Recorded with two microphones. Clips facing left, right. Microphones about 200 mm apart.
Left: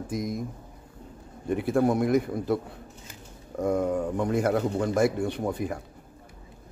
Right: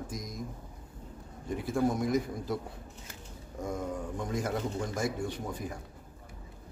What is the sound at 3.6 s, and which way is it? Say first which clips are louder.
Speech: left 10 dB; 65° left (ahead or behind).